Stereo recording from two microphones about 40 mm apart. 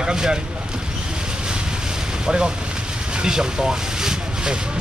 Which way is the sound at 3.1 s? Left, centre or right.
Centre.